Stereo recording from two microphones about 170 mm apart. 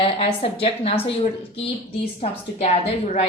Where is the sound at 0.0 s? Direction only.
35° left (ahead or behind).